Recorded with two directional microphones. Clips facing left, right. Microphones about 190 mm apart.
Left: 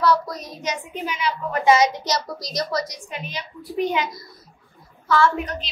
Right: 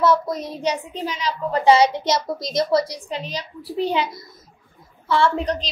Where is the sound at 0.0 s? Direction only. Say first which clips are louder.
Right 2 dB; 25° right (ahead or behind).